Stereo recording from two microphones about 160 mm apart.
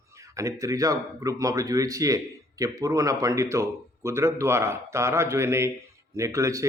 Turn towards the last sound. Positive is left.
turn(degrees=-20)  # may be behind; listen again after turning